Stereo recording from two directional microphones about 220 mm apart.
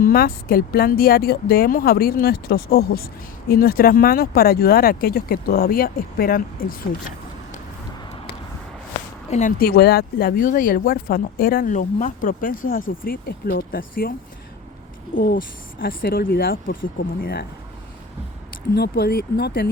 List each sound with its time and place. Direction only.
0.0 s speech: 45° left (ahead or behind)
9.3 s speech: 40° left (ahead or behind)
15.1 s speech: 45° left (ahead or behind)
18.7 s speech: 45° left (ahead or behind)